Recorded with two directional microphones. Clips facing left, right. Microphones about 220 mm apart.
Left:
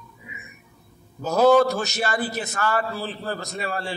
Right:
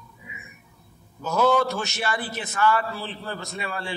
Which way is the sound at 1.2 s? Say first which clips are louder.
Left 5 dB; 40° left (ahead or behind).